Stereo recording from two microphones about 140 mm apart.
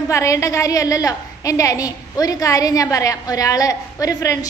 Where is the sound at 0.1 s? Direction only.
20° left (ahead or behind).